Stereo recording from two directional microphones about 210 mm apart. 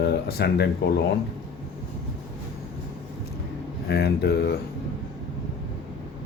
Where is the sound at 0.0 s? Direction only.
50° left (ahead or behind).